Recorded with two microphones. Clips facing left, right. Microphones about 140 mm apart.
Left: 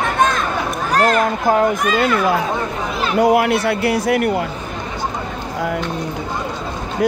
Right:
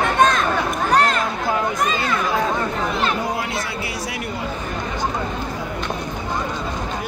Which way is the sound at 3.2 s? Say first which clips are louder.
Left 11 dB; 70° left (ahead or behind).